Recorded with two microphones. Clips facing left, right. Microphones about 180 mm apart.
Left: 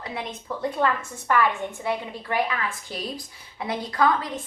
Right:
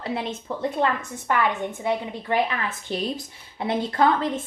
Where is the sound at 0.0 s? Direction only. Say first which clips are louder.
Right 5 dB; 25° right (ahead or behind).